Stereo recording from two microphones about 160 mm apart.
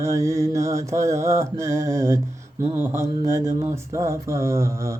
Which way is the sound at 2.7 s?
15° right (ahead or behind).